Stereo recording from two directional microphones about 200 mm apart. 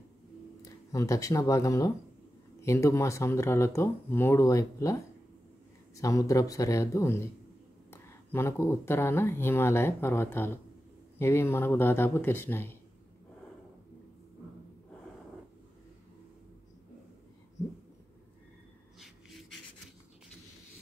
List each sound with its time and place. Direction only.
0.9 s speech: 15° left (ahead or behind)
5.9 s speech: 15° left (ahead or behind)
18.9 s snort: centre (ahead or behind)